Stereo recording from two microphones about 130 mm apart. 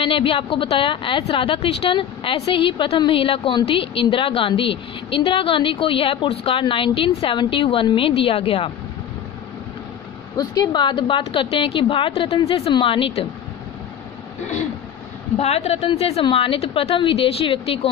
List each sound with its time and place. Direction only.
0.0 s a woman's voice: 45° left (ahead or behind)
10.3 s a woman's voice: 30° left (ahead or behind)
15.3 s a woman's voice: 55° left (ahead or behind)